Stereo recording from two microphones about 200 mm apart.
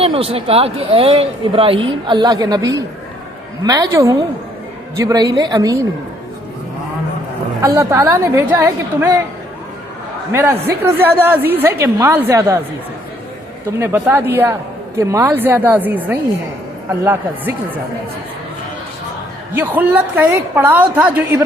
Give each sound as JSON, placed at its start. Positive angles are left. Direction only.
{"t": 0.0, "sound": "a woman's voice", "side_deg": -30}
{"t": 7.6, "sound": "a woman's voice", "side_deg": -15}
{"t": 10.3, "sound": "a woman's voice", "side_deg": -10}
{"t": 13.7, "sound": "a woman's voice", "side_deg": -15}
{"t": 19.5, "sound": "a woman's voice", "side_deg": -10}